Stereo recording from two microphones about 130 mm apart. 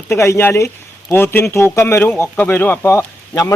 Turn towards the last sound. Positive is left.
turn(degrees=20)  # may be behind; listen again after turning